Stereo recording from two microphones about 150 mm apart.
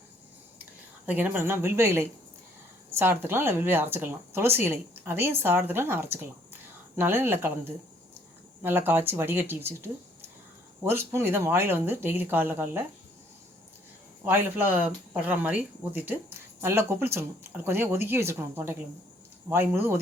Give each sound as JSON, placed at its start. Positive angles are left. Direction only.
{"t": 0.6, "sound": "speech", "side_deg": -10}
{"t": 14.3, "sound": "speech", "side_deg": -15}